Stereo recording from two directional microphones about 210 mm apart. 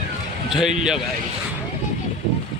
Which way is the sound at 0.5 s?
Centre (ahead or behind).